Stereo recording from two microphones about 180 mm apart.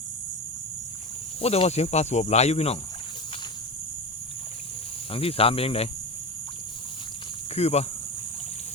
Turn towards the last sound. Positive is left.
turn(degrees=35)  # may be behind; listen again after turning